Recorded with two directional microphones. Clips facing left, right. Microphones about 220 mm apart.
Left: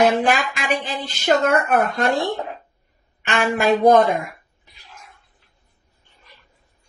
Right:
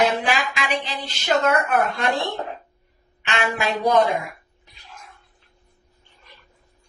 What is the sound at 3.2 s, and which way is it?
Speech, 50° left (ahead or behind).